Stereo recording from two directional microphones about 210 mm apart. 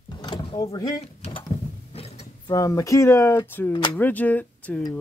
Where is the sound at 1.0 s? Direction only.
25° left (ahead or behind).